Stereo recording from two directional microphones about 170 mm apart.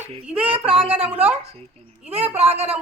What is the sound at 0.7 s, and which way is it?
Speech, 35° right (ahead or behind).